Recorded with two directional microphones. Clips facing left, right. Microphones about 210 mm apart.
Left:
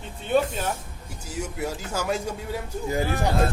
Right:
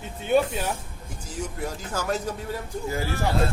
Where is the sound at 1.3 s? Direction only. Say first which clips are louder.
Left 2 dB; 10° left (ahead or behind).